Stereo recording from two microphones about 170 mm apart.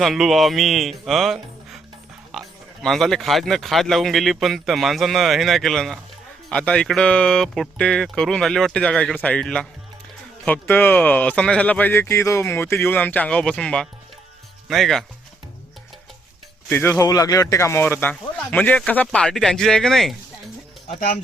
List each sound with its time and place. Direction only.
0.0 s speech: centre (ahead or behind)
2.3 s oink: centre (ahead or behind)
2.8 s speech: centre (ahead or behind)
16.6 s speech: 10° left (ahead or behind)